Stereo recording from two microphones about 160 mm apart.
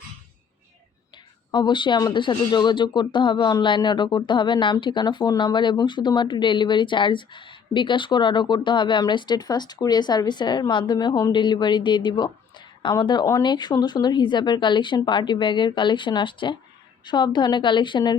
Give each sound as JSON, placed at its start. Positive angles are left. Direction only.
{"t": 1.5, "sound": "speech", "side_deg": 30}